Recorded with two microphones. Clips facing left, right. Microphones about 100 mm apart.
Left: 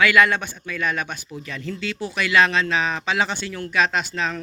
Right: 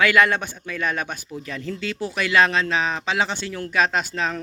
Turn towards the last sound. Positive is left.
turn(degrees=-40)  # may be behind; listen again after turning